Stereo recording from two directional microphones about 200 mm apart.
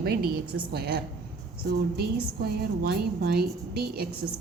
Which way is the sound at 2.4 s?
50° right (ahead or behind).